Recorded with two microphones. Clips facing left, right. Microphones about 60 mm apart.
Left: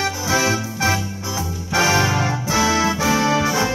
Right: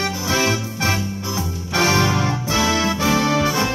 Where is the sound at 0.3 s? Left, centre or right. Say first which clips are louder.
Left 1 dB; left.